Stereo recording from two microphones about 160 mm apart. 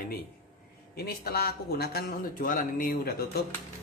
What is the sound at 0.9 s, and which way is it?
A man's voice, 75° left (ahead or behind).